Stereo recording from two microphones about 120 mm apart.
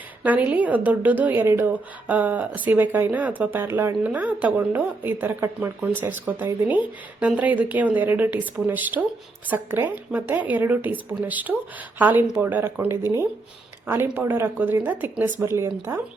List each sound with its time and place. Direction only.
0.2 s a woman's voice: 10° right (ahead or behind)